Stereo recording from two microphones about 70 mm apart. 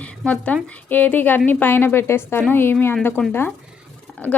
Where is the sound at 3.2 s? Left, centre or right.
Centre.